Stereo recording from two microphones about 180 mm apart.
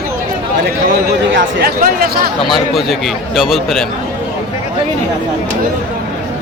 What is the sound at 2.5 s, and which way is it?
Speech, centre (ahead or behind).